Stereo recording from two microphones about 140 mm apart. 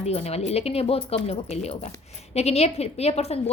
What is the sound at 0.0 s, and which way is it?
A woman's voice, 50° left (ahead or behind).